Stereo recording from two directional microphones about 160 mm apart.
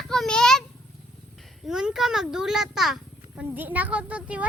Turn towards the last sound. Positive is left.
turn(degrees=-10)  # may be behind; listen again after turning